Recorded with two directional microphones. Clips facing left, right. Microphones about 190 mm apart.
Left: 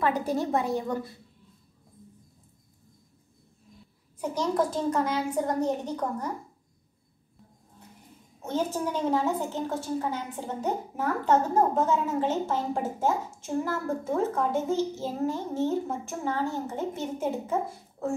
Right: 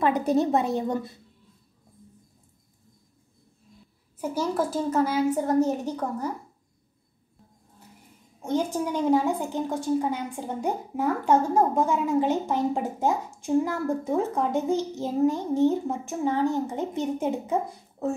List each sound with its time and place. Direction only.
0.0 s a woman's voice: 20° right (ahead or behind)
4.2 s a woman's voice: 10° right (ahead or behind)
8.4 s a woman's voice: 15° right (ahead or behind)